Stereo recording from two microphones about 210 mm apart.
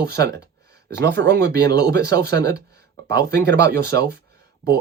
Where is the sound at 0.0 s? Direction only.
50° right (ahead or behind).